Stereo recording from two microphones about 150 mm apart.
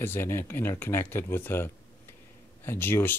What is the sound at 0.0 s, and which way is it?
Speech, 15° left (ahead or behind).